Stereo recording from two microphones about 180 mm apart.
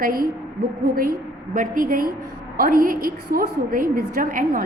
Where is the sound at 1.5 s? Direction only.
50° right (ahead or behind).